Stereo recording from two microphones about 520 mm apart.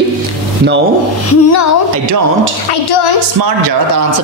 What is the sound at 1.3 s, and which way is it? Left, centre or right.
Speech, left.